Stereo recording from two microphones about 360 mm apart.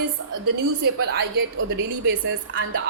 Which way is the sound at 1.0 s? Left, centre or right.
Right.